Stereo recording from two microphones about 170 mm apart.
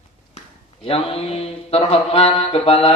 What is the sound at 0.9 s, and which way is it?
Mantra, 35° left (ahead or behind).